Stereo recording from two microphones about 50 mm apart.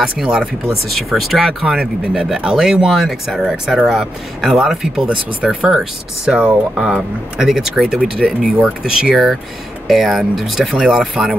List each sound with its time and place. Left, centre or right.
0.0 s speech: centre; by 6.9 s right
6.9 s speech: centre
9.1 s speech: centre